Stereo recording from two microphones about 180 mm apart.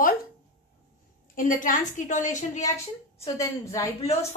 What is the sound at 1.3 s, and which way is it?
A woman's voice, 50° left (ahead or behind).